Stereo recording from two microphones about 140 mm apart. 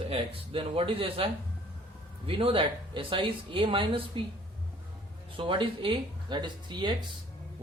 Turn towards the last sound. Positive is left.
turn(degrees=-35)  # may be behind; listen again after turning